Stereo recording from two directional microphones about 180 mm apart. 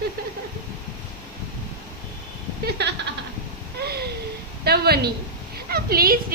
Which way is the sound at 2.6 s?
70° right (ahead or behind).